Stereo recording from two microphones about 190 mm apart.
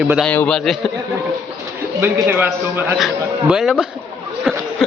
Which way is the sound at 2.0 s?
10° right (ahead or behind).